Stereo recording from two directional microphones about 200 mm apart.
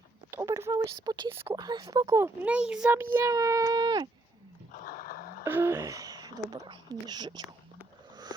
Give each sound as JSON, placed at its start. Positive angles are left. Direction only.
{"t": 0.3, "sound": "speech", "side_deg": -15}
{"t": 4.7, "sound": "dog", "side_deg": 45}
{"t": 5.4, "sound": "speech", "side_deg": -10}